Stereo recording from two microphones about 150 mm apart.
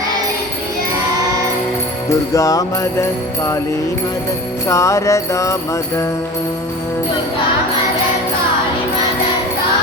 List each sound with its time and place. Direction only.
2.3 s music: 20° left (ahead or behind)
4.7 s music: 20° left (ahead or behind)